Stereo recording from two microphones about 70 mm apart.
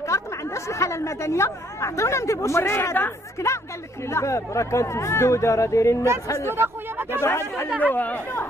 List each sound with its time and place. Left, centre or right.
0.1 s a sound: left
0.7 s a woman's voice: left
6.5 s speech: right
7.2 s speech: left
7.8 s speech: left